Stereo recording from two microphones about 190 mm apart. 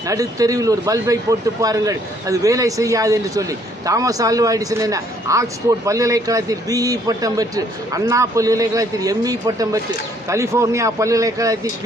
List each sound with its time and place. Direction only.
0.1 s speech: 20° right (ahead or behind)